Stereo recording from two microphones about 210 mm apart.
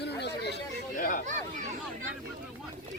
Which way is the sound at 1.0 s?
40° left (ahead or behind).